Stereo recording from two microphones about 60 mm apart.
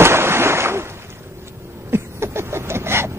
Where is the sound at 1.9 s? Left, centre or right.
Right.